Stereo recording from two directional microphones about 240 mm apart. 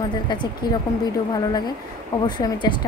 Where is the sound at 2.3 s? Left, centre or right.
Centre.